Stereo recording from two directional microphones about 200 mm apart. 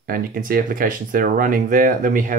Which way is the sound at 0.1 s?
45° right (ahead or behind).